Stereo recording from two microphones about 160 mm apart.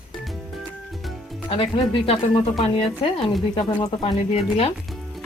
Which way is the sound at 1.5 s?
35° left (ahead or behind).